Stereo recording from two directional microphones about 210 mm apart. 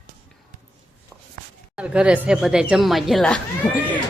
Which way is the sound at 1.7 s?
5° right (ahead or behind).